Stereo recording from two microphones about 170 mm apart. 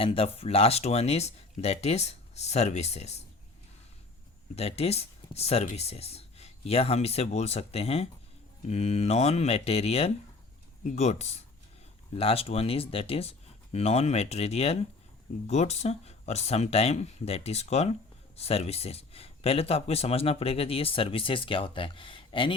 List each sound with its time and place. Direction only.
0.0 s speech: 35° left (ahead or behind)
4.5 s speech: 35° left (ahead or behind)